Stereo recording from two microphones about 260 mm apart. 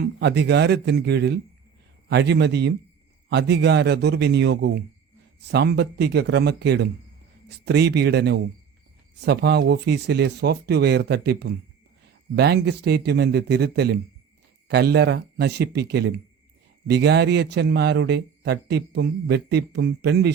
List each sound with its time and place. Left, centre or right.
0.0 s a man's voice: right